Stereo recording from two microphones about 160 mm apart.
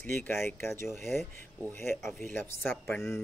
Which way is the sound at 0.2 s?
15° left (ahead or behind).